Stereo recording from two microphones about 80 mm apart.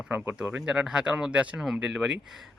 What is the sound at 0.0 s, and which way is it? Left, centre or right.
Speech, centre.